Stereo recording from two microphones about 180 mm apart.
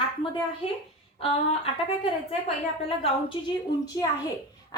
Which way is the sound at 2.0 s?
35° left (ahead or behind).